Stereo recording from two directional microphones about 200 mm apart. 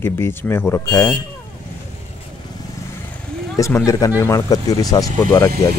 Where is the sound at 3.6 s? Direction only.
15° left (ahead or behind).